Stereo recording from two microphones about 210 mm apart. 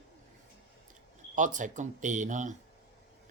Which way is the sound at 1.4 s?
35° right (ahead or behind).